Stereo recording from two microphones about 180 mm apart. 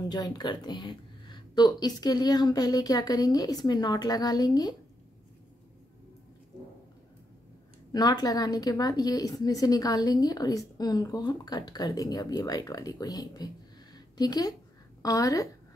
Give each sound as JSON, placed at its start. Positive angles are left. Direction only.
{"t": 0.1, "sound": "speech", "side_deg": 25}
{"t": 7.9, "sound": "speech", "side_deg": 20}
{"t": 13.9, "sound": "a sound", "side_deg": 20}
{"t": 15.0, "sound": "a woman's voice", "side_deg": 20}